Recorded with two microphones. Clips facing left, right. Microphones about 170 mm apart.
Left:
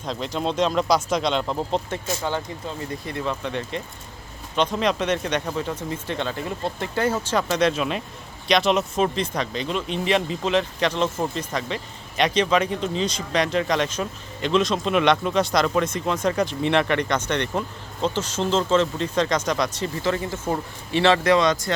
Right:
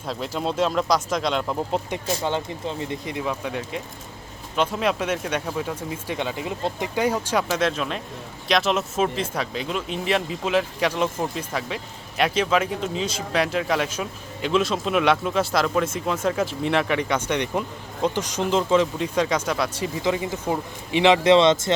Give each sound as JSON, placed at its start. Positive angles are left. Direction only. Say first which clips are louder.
{"t": 0.0, "sound": "speech", "louder": "left 1 dB", "side_deg": -5}
{"t": 1.9, "sound": "speech", "louder": "right 1 dB", "side_deg": -20}